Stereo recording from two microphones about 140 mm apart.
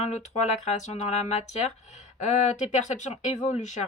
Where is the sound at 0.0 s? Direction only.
55° left (ahead or behind).